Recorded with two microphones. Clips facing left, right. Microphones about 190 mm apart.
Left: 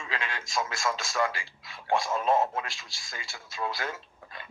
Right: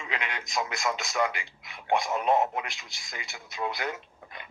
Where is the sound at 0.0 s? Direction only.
20° right (ahead or behind).